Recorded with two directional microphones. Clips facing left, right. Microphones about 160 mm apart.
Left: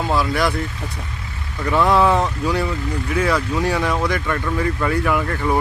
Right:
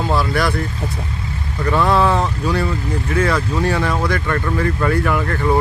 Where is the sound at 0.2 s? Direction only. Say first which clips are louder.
Right 1 dB; 20° left (ahead or behind).